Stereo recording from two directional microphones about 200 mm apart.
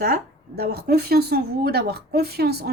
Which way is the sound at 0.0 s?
50° right (ahead or behind).